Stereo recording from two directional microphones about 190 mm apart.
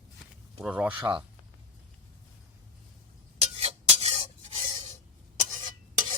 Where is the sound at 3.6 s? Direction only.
35° right (ahead or behind).